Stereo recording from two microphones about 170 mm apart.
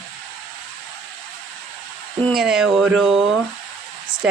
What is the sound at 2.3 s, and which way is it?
Speech, 5° right (ahead or behind).